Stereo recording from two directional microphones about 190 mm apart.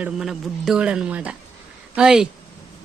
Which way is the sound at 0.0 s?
Centre (ahead or behind).